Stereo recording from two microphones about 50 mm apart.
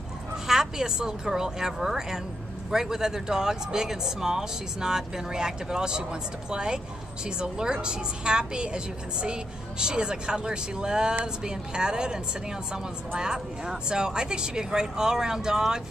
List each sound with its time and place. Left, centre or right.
0.5 s a woman's voice: centre